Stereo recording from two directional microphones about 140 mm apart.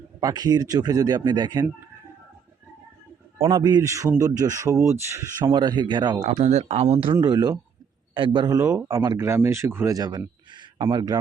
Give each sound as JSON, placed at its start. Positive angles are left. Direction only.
{"t": 0.2, "sound": "speech", "side_deg": -25}
{"t": 3.4, "sound": "speech", "side_deg": -30}
{"t": 5.5, "sound": "speech", "side_deg": -30}
{"t": 6.2, "sound": "speech", "side_deg": -50}
{"t": 7.1, "sound": "speech", "side_deg": -30}